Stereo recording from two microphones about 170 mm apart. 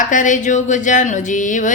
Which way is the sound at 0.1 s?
50° left (ahead or behind).